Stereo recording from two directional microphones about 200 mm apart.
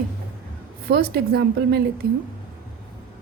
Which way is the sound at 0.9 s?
50° right (ahead or behind).